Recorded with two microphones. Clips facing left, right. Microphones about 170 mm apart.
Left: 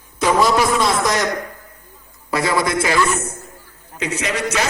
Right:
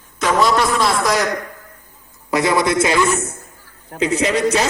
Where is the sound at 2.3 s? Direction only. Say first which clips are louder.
Right 3 dB; 20° right (ahead or behind).